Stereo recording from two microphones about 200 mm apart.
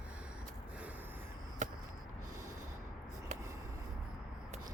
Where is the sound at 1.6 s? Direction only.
40° right (ahead or behind).